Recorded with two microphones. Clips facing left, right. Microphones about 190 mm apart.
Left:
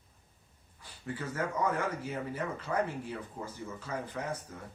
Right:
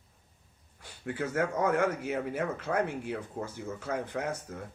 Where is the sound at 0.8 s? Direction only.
75° right (ahead or behind).